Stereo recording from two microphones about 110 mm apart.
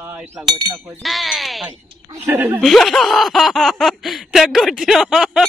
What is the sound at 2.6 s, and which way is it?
Speech, centre (ahead or behind).